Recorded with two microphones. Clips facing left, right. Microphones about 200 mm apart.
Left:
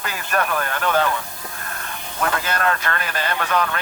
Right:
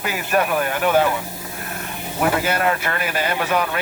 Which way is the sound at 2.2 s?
20° right (ahead or behind).